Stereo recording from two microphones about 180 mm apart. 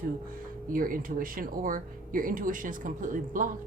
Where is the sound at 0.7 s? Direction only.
50° right (ahead or behind).